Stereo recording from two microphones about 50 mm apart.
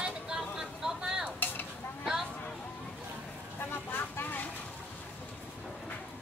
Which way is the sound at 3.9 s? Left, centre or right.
Left.